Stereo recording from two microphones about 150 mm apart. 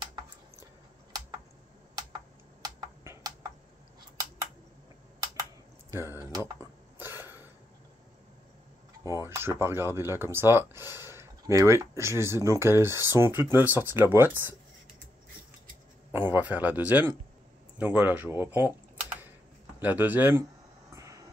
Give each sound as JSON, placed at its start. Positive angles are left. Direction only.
{"t": 2.6, "sound": "computer keyboard", "side_deg": -25}
{"t": 5.2, "sound": "typing", "side_deg": -20}
{"t": 9.0, "sound": "speech", "side_deg": -20}
{"t": 16.1, "sound": "speech", "side_deg": -15}
{"t": 19.8, "sound": "speech", "side_deg": -10}
{"t": 20.9, "sound": "vehicle", "side_deg": -20}